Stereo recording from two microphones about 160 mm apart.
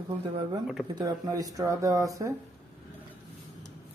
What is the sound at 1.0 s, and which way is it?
Speech, 20° right (ahead or behind).